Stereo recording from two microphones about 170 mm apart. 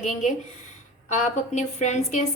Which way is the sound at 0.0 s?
45° left (ahead or behind).